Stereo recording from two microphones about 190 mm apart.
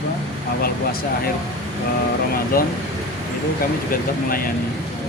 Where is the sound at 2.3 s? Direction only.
50° left (ahead or behind).